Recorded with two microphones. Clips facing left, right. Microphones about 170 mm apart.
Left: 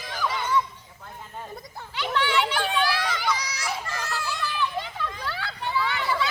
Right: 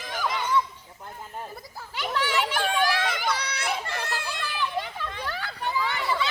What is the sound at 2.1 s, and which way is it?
Children playing, 45° right (ahead or behind).